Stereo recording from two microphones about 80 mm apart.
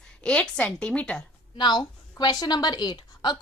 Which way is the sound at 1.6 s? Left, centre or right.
Left.